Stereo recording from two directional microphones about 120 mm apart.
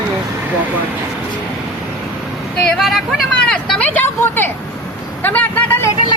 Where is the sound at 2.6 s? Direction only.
Centre (ahead or behind).